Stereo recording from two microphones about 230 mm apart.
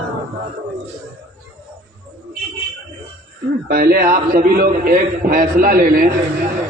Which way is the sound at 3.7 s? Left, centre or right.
Right.